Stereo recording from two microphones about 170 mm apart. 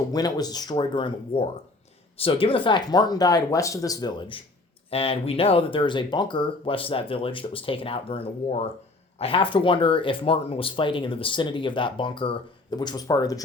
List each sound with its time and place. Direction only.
0.1 s speech: 20° left (ahead or behind)